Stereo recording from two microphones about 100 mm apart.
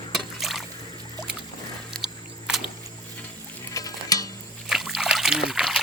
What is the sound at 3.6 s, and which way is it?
Stir, 35° left (ahead or behind).